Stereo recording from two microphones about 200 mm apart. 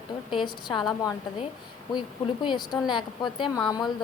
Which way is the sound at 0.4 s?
20° left (ahead or behind).